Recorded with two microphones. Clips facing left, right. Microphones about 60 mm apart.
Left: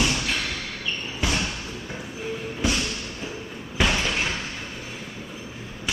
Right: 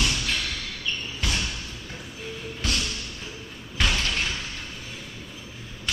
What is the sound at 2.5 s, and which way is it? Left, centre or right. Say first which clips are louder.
Music: left 4 dB; centre.